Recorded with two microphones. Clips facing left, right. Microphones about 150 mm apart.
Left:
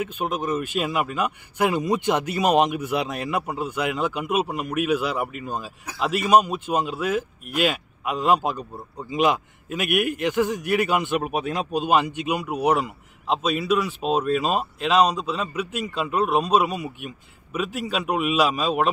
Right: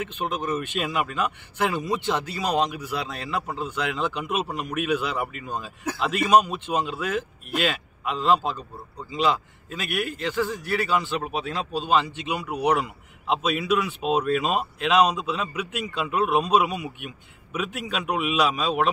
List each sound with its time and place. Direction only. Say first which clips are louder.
0.0 s a man's voice: left 2 dB; 10° left (ahead or behind)